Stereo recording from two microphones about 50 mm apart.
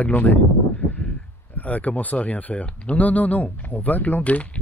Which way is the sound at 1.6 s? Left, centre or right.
Left.